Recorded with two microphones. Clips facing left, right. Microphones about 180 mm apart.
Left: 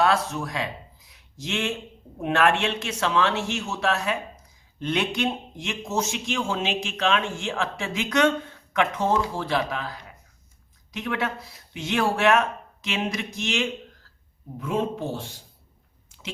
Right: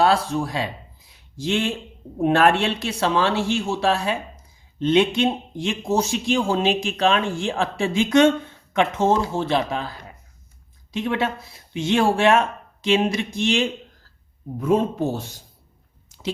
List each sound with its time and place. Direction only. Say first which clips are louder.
0.0 s speech: right 4 dB; 30° right (ahead or behind)
14.6 s speech: right 6 dB; 40° right (ahead or behind)
16.0 s chewing: right 12 dB; 35° right (ahead or behind)